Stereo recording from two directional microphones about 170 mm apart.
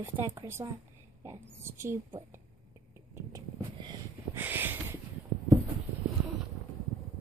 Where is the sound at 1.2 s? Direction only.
15° right (ahead or behind).